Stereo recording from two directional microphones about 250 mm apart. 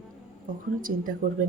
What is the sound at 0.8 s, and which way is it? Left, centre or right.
Speech, right.